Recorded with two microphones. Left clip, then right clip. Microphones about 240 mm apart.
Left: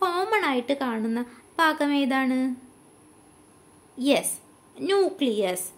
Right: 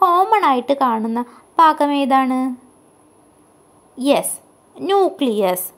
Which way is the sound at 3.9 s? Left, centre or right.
Centre.